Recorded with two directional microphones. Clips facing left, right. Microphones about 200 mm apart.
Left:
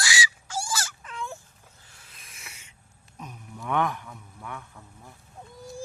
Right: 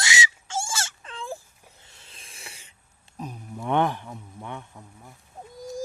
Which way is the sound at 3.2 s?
30° right (ahead or behind).